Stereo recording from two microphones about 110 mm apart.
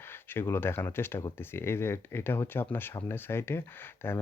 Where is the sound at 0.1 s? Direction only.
20° left (ahead or behind).